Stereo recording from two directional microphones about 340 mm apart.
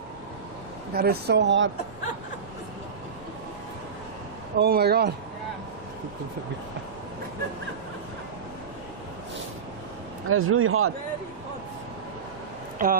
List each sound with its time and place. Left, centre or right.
0.9 s speech: right
4.5 s speech: right
10.2 s speech: right
12.8 s speech: right